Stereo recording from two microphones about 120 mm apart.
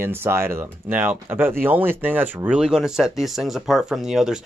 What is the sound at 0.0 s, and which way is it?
Speech, 20° right (ahead or behind).